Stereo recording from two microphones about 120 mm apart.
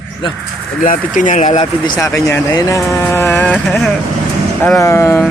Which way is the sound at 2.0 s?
25° left (ahead or behind).